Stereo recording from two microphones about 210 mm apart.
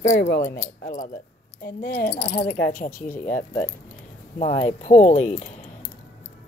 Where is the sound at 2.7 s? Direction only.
40° left (ahead or behind).